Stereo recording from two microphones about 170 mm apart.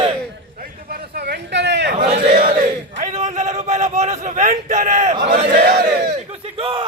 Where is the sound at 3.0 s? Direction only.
45° right (ahead or behind).